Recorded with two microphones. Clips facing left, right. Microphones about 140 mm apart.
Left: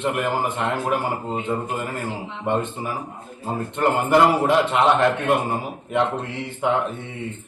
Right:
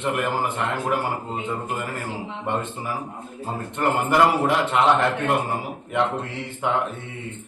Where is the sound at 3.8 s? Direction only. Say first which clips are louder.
Left 2 dB; 20° left (ahead or behind).